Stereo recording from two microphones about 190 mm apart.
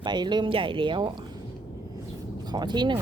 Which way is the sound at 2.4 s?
20° right (ahead or behind).